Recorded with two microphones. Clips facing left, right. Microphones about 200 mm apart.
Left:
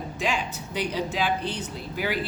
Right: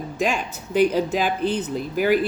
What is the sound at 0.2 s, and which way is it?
Speech, 45° right (ahead or behind).